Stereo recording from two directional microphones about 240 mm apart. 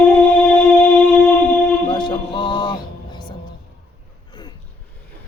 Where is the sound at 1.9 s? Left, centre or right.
Centre.